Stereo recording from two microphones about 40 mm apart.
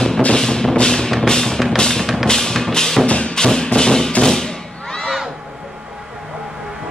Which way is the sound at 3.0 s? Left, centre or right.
Left.